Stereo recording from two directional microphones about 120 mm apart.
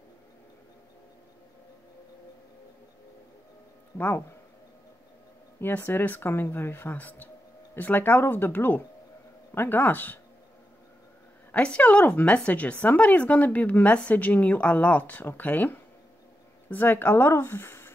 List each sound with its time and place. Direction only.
3.9 s a sound: 25° left (ahead or behind)
5.6 s speech: 15° left (ahead or behind)
11.5 s speech: 10° left (ahead or behind)